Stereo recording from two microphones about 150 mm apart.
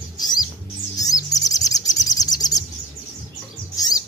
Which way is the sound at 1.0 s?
25° left (ahead or behind).